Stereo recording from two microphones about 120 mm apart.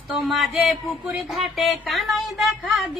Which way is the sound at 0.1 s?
Centre (ahead or behind).